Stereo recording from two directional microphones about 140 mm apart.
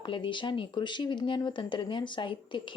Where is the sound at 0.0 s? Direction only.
35° left (ahead or behind).